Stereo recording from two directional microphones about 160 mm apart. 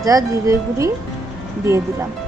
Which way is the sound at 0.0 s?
20° right (ahead or behind).